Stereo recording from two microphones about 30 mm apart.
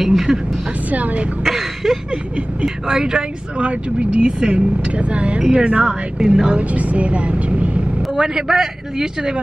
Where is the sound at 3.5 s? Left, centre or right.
Right.